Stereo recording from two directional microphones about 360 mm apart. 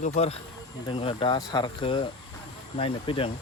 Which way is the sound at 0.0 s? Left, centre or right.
Centre.